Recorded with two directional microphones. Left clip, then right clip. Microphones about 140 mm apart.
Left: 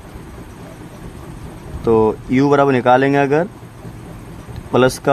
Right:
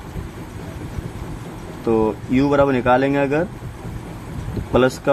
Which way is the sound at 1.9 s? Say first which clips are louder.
Left 5 dB; 90° left.